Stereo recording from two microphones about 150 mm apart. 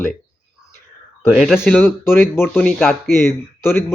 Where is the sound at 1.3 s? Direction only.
5° right (ahead or behind).